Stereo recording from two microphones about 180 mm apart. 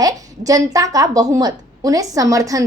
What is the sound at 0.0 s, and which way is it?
A woman's voice, 20° right (ahead or behind).